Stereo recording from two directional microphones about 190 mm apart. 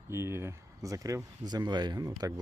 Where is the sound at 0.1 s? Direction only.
15° right (ahead or behind).